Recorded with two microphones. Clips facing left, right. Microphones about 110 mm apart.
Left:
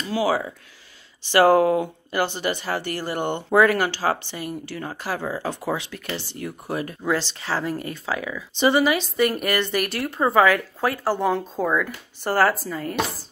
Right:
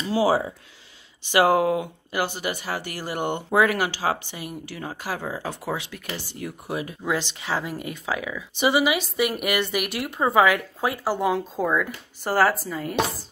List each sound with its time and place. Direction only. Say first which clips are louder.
0.1 s speech: right 2 dB; 30° right (ahead or behind)
1.2 s speech: left 3 dB; 10° right (ahead or behind)